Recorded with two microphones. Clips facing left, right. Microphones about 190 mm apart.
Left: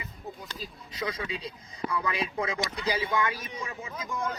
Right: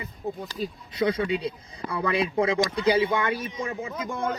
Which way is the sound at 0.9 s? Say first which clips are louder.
Right 9 dB; 30° right (ahead or behind).